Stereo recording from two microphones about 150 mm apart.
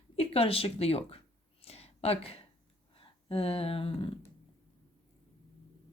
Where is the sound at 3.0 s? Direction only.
40° left (ahead or behind).